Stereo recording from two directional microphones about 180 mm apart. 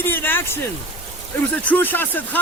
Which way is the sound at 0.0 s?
10° left (ahead or behind).